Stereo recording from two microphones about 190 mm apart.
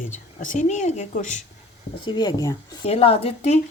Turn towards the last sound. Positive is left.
turn(degrees=35)  # may be behind; listen again after turning